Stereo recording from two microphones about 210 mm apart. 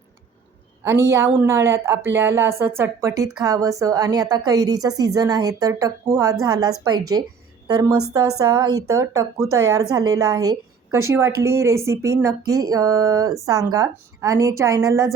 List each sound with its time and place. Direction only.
0.9 s a woman's voice: 15° right (ahead or behind)